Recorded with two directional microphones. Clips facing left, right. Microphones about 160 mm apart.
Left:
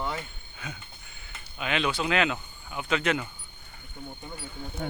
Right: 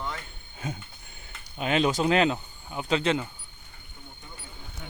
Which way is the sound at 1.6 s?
40° right (ahead or behind).